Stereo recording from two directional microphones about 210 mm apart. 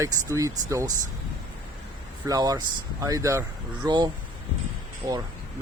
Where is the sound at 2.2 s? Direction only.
15° right (ahead or behind).